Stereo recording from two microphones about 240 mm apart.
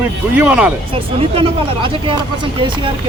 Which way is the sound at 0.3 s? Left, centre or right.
Centre.